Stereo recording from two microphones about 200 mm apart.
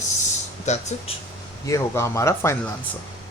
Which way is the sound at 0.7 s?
35° left (ahead or behind).